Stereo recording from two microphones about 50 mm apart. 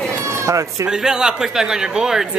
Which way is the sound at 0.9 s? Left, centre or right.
Centre.